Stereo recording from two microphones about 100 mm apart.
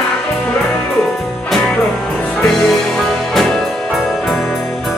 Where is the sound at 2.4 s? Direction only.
5° left (ahead or behind).